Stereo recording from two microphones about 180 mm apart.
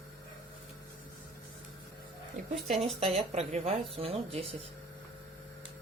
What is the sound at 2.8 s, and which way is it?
A woman's voice, 35° right (ahead or behind).